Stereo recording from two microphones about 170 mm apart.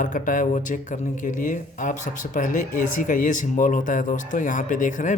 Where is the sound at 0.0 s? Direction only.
50° left (ahead or behind).